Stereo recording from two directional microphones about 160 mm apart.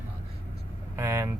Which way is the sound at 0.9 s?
20° right (ahead or behind).